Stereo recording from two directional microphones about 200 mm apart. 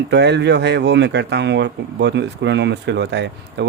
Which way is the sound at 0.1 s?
60° right (ahead or behind).